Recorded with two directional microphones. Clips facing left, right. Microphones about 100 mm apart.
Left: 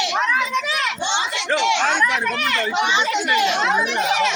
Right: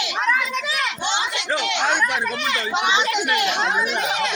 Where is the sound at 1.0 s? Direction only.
5° right (ahead or behind).